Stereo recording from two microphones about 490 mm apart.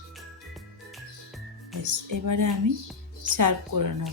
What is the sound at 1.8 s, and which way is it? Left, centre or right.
Speech, right.